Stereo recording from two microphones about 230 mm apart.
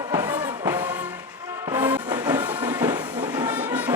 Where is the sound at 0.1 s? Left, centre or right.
Centre.